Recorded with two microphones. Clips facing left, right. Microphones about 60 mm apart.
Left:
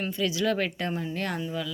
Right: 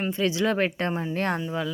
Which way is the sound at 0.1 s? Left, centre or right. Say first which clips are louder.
Right 2 dB; right.